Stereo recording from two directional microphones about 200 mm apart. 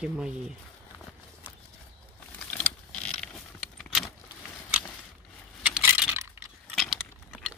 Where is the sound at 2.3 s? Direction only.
5° left (ahead or behind).